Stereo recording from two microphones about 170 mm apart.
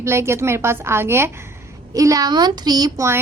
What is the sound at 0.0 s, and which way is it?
A woman's voice, 15° right (ahead or behind).